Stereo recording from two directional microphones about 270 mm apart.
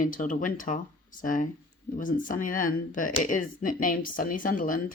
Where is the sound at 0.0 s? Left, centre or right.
Left.